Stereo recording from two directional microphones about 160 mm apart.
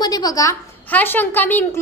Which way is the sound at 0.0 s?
25° left (ahead or behind).